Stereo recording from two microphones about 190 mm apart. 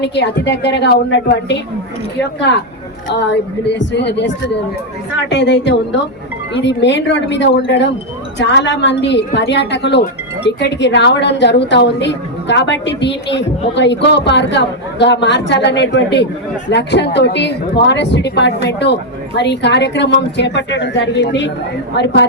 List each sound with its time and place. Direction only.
0.0 s a woman's voice: 65° left (ahead or behind)